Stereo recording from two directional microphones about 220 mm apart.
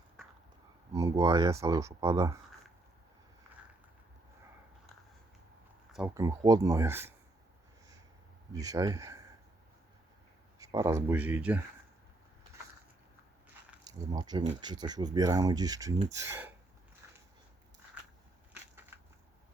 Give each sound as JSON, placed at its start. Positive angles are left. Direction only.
{"t": 0.9, "sound": "speech", "side_deg": -15}
{"t": 6.1, "sound": "speech", "side_deg": -15}
{"t": 8.5, "sound": "speech", "side_deg": -15}
{"t": 10.6, "sound": "speech", "side_deg": -15}
{"t": 13.8, "sound": "speech", "side_deg": -15}